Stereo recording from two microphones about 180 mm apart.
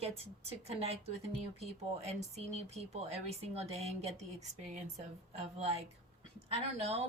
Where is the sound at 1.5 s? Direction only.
40° right (ahead or behind).